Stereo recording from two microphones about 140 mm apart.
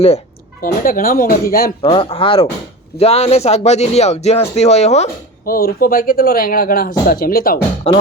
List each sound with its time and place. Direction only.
0.6 s speech: 85° left
1.8 s speech: 40° left (ahead or behind)
5.5 s speech: 90° left
7.9 s speech: 50° left (ahead or behind)